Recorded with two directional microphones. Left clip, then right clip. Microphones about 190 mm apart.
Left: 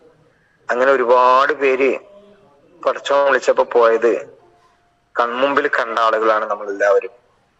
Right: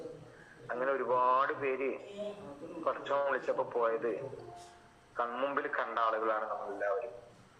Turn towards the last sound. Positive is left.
turn(degrees=60)  # may be behind; listen again after turning